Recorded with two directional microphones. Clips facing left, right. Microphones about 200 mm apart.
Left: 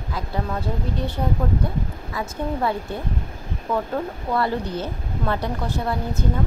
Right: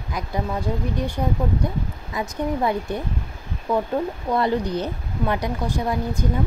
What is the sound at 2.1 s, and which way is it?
Speech, 15° right (ahead or behind).